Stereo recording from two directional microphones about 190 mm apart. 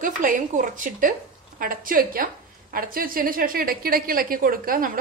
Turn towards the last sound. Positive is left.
turn(degrees=-50)  # may be behind; listen again after turning